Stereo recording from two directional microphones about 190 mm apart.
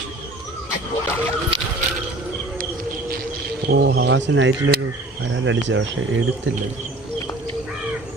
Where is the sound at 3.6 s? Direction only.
60° right (ahead or behind).